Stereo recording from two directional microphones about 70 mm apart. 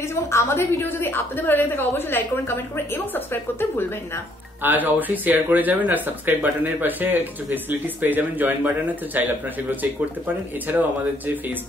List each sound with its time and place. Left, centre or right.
0.1 s a woman's voice: left
4.6 s speech: right